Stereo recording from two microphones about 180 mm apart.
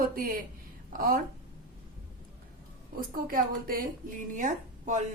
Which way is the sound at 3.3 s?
50° right (ahead or behind).